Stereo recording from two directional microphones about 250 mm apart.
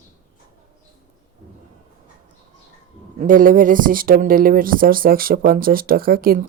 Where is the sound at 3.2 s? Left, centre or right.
Right.